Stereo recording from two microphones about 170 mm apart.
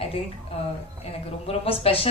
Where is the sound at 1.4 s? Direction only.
35° left (ahead or behind).